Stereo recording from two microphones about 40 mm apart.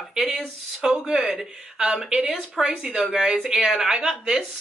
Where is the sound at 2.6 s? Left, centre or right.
Centre.